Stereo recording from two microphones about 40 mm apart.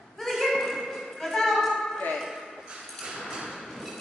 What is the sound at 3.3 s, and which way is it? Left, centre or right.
Thump, centre.